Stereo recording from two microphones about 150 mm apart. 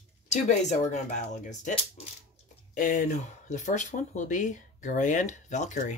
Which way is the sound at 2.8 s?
60° left (ahead or behind).